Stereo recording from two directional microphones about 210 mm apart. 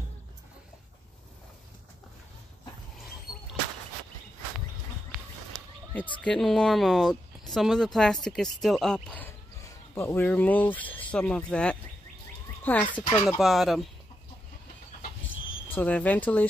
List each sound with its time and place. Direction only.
5.5 s speech: 5° left (ahead or behind)
12.8 s speech: 20° left (ahead or behind)
13.4 s speech: centre (ahead or behind)
15.7 s speech: 5° left (ahead or behind)